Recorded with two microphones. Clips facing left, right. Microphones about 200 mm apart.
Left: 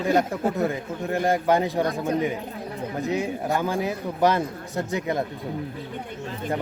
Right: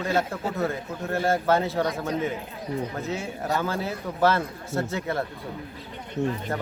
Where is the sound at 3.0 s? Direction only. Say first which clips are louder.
Left 5 dB; 15° left (ahead or behind).